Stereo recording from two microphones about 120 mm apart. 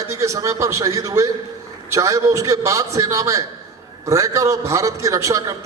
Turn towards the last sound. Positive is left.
turn(degrees=-25)  # may be behind; listen again after turning